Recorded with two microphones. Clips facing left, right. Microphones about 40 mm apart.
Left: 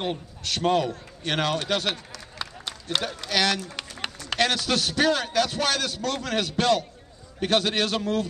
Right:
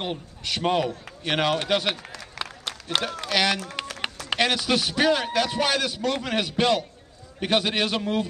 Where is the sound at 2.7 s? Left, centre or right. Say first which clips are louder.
Right 1 dB; centre.